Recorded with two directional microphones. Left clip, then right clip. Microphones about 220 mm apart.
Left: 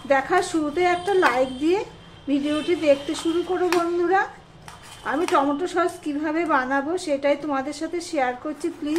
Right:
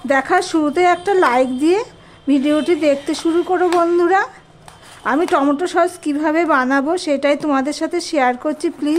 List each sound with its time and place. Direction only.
0.1 s a woman's voice: 50° right (ahead or behind)